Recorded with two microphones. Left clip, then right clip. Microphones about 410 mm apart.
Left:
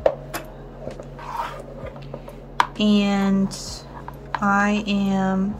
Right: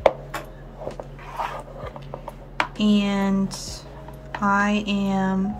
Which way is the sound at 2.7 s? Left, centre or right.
Centre.